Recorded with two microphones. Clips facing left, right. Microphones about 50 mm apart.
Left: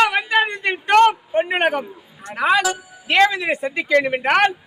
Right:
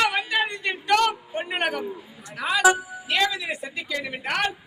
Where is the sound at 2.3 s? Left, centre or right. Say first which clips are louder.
Left 2 dB; left.